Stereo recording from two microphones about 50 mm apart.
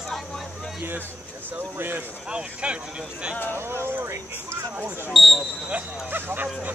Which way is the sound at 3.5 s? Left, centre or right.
Right.